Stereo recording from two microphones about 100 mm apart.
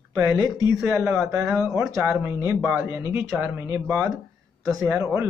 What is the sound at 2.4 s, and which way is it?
A man's voice, 20° right (ahead or behind).